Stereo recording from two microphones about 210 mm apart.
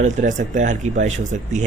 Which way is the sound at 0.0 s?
35° right (ahead or behind).